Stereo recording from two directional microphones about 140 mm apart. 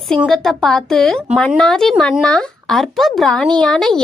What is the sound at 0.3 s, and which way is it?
Ding, 5° left (ahead or behind).